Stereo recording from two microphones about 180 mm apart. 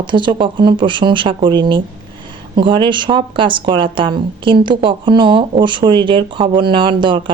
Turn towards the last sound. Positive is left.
turn(degrees=-25)  # may be behind; listen again after turning